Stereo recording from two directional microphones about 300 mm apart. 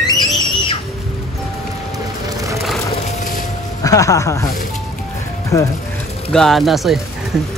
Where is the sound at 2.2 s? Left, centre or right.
Centre.